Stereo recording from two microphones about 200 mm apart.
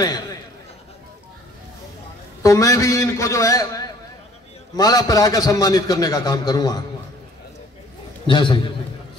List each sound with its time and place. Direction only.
0.0 s a man's voice: 20° left (ahead or behind)
2.4 s a man's voice: 15° left (ahead or behind)
8.3 s a man's voice: 25° left (ahead or behind)